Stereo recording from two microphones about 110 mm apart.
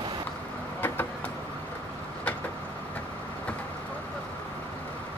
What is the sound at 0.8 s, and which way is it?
Vehicle, 20° left (ahead or behind).